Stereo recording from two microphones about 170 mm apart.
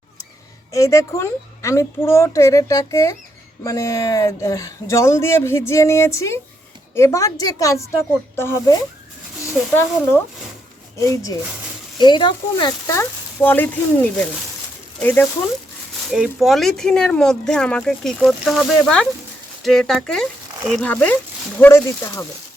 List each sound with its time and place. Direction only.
0.7 s a woman's voice: 20° left (ahead or behind)
10.9 s a woman's voice: 20° left (ahead or behind)
12.9 s speech: 15° left (ahead or behind)
16.0 s speech: 5° right (ahead or behind); by 22.3 s 15° left (ahead or behind)